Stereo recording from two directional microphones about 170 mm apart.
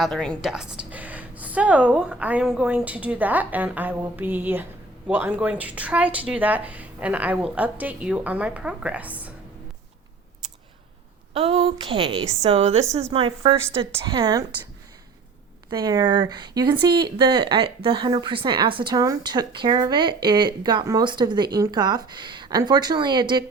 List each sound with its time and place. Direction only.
0.0 s a woman's voice: 5° left (ahead or behind)
11.3 s a woman's voice: 35° right (ahead or behind)
15.7 s speech: 25° right (ahead or behind)